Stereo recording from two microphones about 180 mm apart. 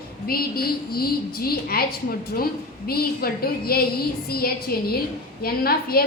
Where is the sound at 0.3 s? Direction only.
55° left (ahead or behind).